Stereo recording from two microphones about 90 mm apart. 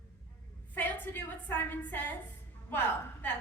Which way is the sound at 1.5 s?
20° left (ahead or behind).